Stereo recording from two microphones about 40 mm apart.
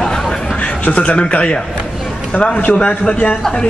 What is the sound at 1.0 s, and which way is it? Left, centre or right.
A man's voice, left.